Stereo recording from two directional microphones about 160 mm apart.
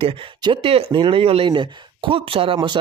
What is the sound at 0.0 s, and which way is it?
Speech, 30° right (ahead or behind).